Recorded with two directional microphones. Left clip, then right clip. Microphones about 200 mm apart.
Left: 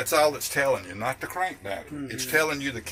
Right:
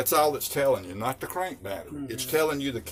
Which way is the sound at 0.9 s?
65° right (ahead or behind).